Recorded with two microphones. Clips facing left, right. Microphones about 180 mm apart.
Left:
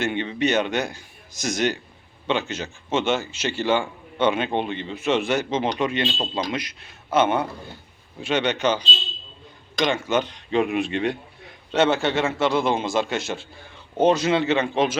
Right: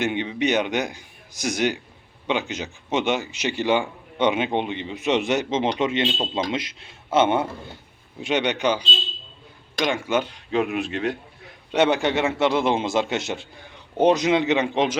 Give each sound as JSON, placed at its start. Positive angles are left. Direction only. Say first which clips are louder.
{"t": 0.0, "sound": "a man's voice", "louder": "even", "side_deg": -15}
{"t": 11.7, "sound": "a man's voice", "louder": "even", "side_deg": -15}